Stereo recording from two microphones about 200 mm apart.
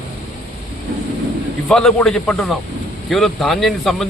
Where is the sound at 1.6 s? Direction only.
5° left (ahead or behind).